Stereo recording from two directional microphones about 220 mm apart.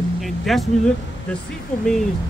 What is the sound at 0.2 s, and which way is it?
Speech, centre (ahead or behind).